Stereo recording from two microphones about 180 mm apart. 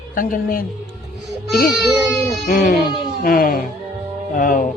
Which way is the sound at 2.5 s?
50° left (ahead or behind).